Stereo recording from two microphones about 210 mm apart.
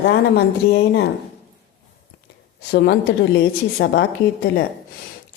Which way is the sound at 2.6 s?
50° left (ahead or behind).